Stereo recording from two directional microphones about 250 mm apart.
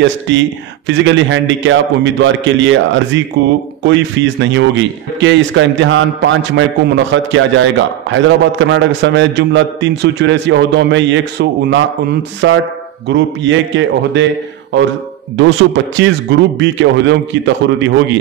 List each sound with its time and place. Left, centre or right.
0.0 s a man's voice: right